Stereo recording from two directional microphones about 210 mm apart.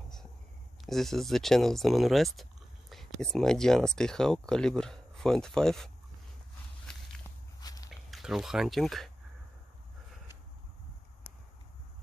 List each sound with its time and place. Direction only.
0.8 s speech: centre (ahead or behind)
7.6 s walk: 15° left (ahead or behind)
8.1 s speech: centre (ahead or behind)